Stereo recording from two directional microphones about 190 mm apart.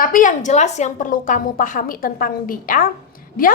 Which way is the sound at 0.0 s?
45° left (ahead or behind).